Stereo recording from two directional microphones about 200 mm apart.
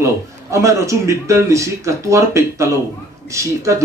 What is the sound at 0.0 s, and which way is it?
A man's voice, 15° right (ahead or behind).